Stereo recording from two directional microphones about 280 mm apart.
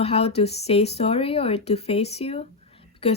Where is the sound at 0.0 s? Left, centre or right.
Left.